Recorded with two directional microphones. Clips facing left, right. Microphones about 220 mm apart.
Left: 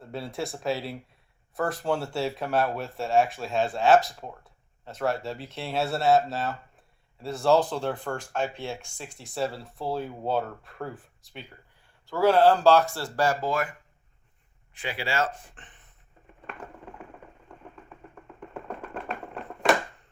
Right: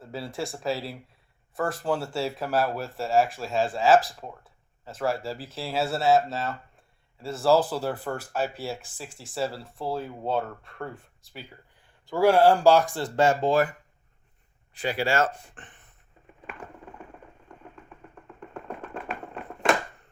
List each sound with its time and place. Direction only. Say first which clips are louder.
0.0 s speech: even; centre (ahead or behind)
12.0 s speech: right 1 dB; 15° right (ahead or behind); by 13.7 s 35° right (ahead or behind)
14.8 s speech: right 4 dB; 40° right (ahead or behind)